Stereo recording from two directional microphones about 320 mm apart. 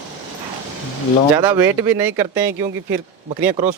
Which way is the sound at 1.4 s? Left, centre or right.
Centre.